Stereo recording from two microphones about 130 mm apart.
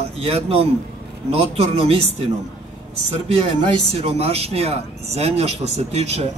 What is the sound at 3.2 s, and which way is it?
Speech, 50° right (ahead or behind).